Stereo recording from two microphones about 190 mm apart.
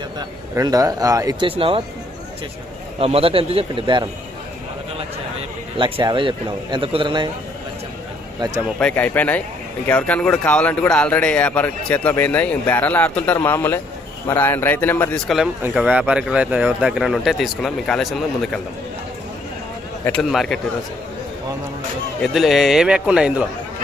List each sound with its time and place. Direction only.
0.2 s speech: 20° right (ahead or behind)
3.0 s speech: 30° right (ahead or behind)
5.7 s speech: 25° right (ahead or behind)
8.4 s speech: 20° right (ahead or behind)
8.8 s speech: 5° left (ahead or behind)
20.2 s speech: centre (ahead or behind)
22.2 s speech: centre (ahead or behind)